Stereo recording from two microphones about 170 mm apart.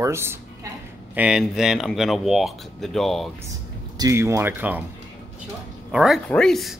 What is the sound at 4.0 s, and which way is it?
Speech, 15° right (ahead or behind).